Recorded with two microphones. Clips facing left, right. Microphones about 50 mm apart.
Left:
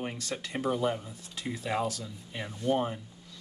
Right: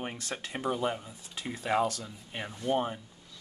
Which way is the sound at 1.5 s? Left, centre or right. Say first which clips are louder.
Right 3 dB; right.